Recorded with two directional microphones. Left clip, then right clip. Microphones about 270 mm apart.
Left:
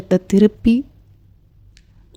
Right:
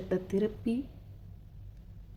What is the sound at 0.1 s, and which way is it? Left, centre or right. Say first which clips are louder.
Speech: left 16 dB; left.